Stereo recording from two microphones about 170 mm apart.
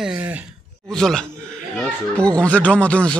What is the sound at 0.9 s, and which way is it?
A man's voice, 5° left (ahead or behind).